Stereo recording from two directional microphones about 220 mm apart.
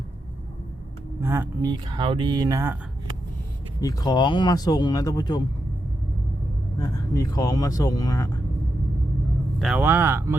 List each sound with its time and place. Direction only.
1.2 s speech: 10° right (ahead or behind)
1.7 s speech: 20° right (ahead or behind)
3.8 s speech: 15° left (ahead or behind)
6.7 s speech: 15° left (ahead or behind)
9.6 s speech: 5° right (ahead or behind)